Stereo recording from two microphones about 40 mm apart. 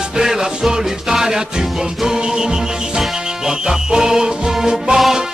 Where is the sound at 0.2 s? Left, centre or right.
Centre.